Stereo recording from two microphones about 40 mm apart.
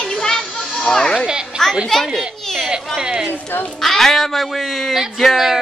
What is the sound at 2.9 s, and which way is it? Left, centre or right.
Speech, centre.